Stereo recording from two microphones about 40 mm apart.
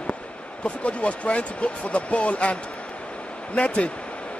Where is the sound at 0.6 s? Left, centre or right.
Left.